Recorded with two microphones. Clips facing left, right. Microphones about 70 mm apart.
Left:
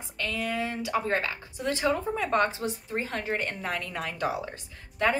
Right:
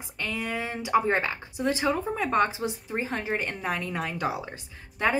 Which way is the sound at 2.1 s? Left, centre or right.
Centre.